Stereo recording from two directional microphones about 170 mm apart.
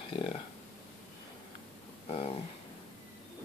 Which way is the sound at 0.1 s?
30° left (ahead or behind).